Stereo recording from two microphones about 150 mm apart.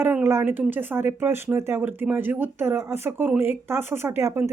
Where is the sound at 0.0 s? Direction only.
15° right (ahead or behind).